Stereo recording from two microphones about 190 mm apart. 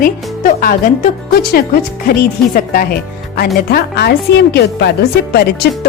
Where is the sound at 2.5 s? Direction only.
50° left (ahead or behind).